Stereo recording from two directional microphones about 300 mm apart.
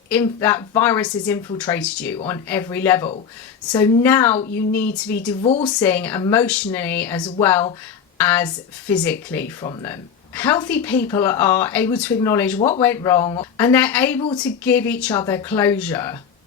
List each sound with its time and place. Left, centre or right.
0.1 s speech: centre
5.4 s speech: centre
5.6 s a woman's voice: centre
12.5 s speech: left
12.8 s speech: centre